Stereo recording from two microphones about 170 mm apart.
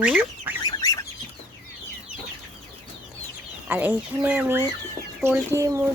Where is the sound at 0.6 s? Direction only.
20° left (ahead or behind).